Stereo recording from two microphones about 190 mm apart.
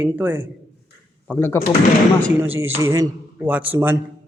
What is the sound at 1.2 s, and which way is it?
Speech, 10° left (ahead or behind).